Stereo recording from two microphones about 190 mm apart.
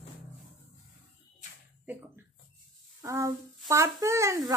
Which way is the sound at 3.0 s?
15° right (ahead or behind).